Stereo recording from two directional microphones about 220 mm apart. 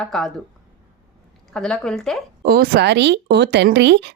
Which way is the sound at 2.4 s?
45° right (ahead or behind).